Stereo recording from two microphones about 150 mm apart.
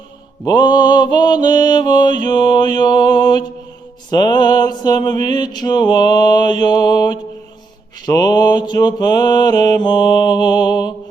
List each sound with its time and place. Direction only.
0.4 s mantra: 30° left (ahead or behind)